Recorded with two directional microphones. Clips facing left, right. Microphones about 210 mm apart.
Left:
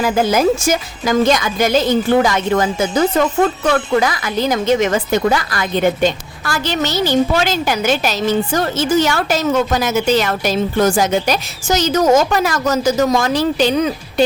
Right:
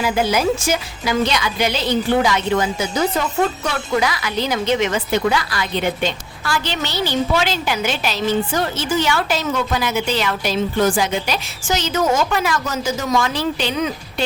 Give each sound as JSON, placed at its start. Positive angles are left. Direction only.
{"t": 0.0, "sound": "a woman's voice", "side_deg": 45}